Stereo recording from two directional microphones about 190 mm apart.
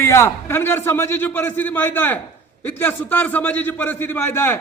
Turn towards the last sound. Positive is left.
turn(degrees=10)  # may be behind; listen again after turning